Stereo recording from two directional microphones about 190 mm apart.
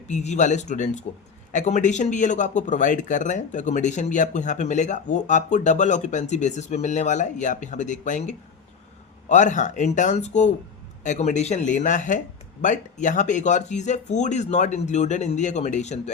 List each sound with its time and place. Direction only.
0.1 s speech: 40° left (ahead or behind)